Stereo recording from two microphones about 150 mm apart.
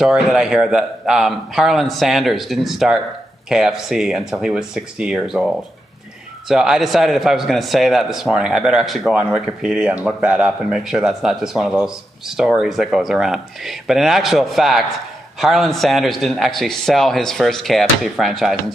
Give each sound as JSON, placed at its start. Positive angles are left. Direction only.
{"t": 0.0, "sound": "a man's voice", "side_deg": -5}
{"t": 6.5, "sound": "a man's voice", "side_deg": -5}